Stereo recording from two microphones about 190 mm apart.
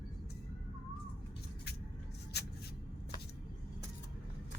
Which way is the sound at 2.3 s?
60° left (ahead or behind).